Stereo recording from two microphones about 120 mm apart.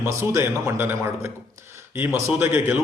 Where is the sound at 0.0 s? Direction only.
20° right (ahead or behind).